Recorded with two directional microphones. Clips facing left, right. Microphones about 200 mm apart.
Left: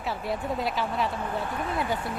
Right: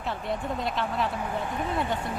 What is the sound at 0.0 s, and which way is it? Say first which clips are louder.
Speech: even; 5° left (ahead or behind).